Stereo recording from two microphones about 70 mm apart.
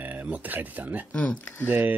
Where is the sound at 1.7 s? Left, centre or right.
Right.